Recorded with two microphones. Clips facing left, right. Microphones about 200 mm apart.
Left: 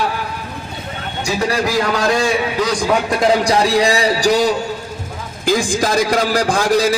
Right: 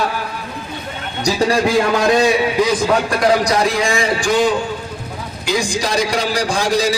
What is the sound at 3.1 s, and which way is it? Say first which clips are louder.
A man's voice: left 1 dB; 25° left (ahead or behind).